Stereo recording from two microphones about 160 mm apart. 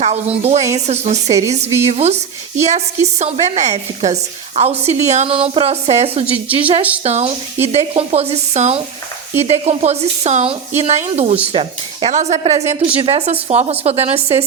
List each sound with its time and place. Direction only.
0.0 s a woman's voice: 40° right (ahead or behind)